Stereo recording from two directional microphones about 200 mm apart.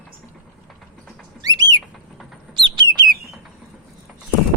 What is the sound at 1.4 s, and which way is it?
Bird, 20° right (ahead or behind).